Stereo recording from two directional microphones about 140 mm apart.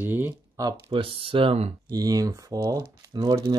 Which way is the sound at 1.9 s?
25° right (ahead or behind).